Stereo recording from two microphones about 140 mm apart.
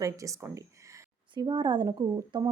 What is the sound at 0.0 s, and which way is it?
Speech, 25° right (ahead or behind).